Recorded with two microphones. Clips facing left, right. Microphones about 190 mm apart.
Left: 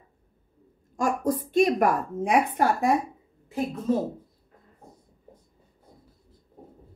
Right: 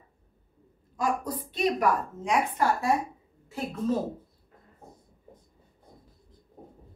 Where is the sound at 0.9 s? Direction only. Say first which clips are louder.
Left 4 dB; 45° left (ahead or behind).